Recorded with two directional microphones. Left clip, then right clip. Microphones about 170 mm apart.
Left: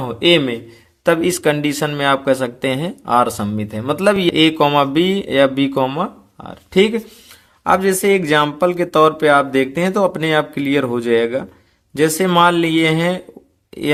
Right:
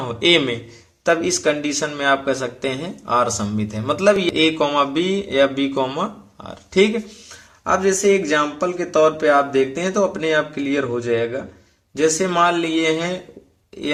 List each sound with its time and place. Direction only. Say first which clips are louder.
0.0 s a man's voice: left 2 dB; 40° left (ahead or behind)
1.0 s speech: left 3 dB; 50° left (ahead or behind)
7.6 s speech: left 2 dB; 50° left (ahead or behind)